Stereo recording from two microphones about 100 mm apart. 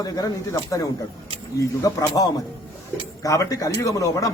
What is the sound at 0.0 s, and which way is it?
Speech, 35° left (ahead or behind).